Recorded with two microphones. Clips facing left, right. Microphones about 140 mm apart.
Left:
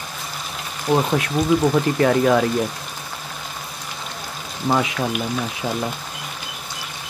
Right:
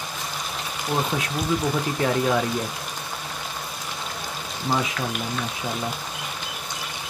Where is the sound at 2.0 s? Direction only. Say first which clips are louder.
Left 5 dB; 65° left (ahead or behind).